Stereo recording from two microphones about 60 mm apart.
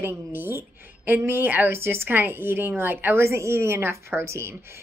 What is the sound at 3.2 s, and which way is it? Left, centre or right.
A woman's voice, right.